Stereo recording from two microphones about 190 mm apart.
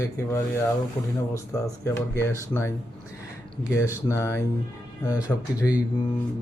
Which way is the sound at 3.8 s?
15° left (ahead or behind).